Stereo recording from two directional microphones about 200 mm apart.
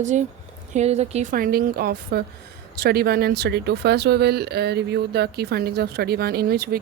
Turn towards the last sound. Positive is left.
turn(degrees=-50)  # may be behind; listen again after turning